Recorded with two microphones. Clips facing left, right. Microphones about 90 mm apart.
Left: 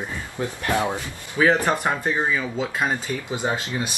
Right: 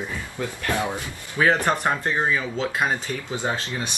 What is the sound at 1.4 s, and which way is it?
Speech, 5° left (ahead or behind).